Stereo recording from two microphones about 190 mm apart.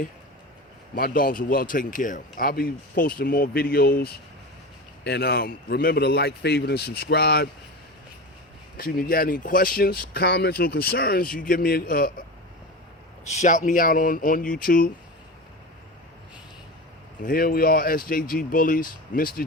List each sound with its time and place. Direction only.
0.9 s a man's voice: 50° left (ahead or behind)
8.8 s speech: 50° left (ahead or behind)
13.2 s speech: 35° left (ahead or behind)
17.2 s speech: 50° left (ahead or behind)